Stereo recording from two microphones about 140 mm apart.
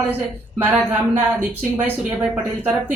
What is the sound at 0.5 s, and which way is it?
Speech, 15° right (ahead or behind).